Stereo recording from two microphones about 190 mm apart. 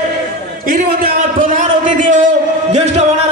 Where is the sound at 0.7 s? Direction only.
50° right (ahead or behind).